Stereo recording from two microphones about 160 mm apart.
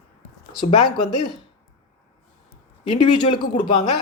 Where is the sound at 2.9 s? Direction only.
30° left (ahead or behind).